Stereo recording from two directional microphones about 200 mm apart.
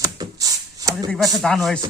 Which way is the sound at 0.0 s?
20° right (ahead or behind).